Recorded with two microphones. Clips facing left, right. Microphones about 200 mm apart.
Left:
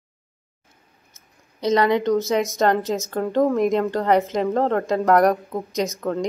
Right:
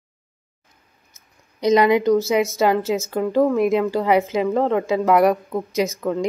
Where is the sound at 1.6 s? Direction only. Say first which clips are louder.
Right 3 dB; 15° right (ahead or behind).